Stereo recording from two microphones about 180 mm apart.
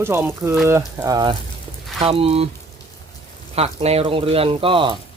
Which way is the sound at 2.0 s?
30° right (ahead or behind).